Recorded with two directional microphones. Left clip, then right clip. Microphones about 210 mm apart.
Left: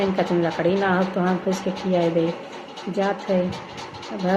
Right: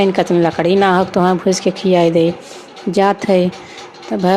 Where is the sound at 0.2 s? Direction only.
50° right (ahead or behind).